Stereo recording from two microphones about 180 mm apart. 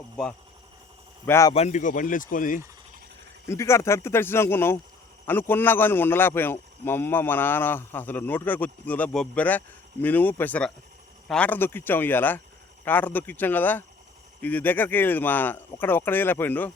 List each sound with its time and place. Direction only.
1.3 s a man's voice: 15° left (ahead or behind)
1.5 s speech: 40° left (ahead or behind)
3.4 s a man's voice: 15° left (ahead or behind)